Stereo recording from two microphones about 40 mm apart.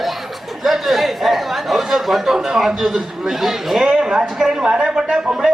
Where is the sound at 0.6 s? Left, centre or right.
Centre.